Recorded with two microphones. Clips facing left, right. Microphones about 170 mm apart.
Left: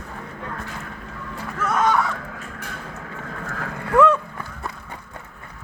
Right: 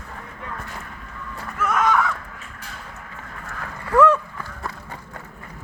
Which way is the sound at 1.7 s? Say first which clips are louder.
Even; 30° left (ahead or behind).